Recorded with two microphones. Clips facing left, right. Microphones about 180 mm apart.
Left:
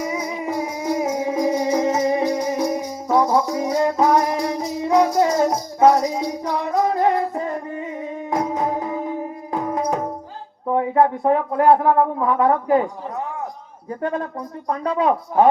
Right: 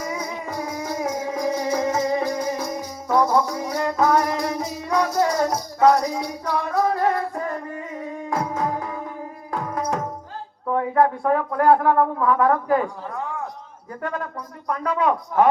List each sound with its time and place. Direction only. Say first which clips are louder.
0.0 s music: left 4 dB; 15° left (ahead or behind)
10.7 s speech: left 2 dB; 20° left (ahead or behind)